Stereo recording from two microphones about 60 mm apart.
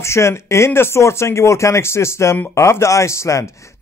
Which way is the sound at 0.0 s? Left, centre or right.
Left.